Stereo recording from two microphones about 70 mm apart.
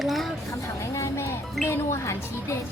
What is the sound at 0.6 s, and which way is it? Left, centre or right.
Speech, left.